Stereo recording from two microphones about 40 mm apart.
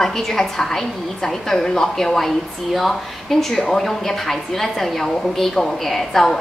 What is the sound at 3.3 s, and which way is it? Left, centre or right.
A woman's voice, centre.